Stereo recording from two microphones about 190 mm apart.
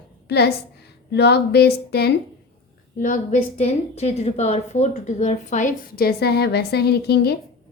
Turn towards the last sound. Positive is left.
turn(degrees=60)  # may be behind; listen again after turning